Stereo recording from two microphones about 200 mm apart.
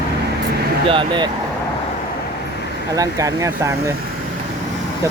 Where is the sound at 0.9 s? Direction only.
25° right (ahead or behind).